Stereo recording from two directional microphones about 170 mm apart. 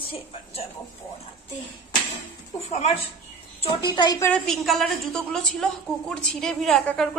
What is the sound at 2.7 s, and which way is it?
A woman's voice, 35° left (ahead or behind).